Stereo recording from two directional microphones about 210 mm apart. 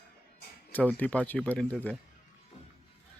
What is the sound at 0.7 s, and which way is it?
Speech, 10° left (ahead or behind).